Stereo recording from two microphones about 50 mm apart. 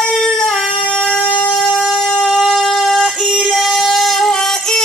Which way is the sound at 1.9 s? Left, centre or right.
Centre.